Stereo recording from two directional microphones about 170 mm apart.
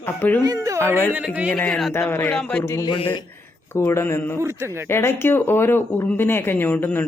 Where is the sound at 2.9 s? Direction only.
30° left (ahead or behind).